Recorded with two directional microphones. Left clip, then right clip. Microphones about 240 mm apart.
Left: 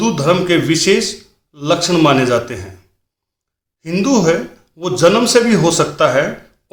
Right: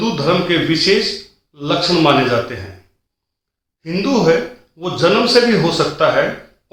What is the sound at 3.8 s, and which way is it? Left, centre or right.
A man's voice, left.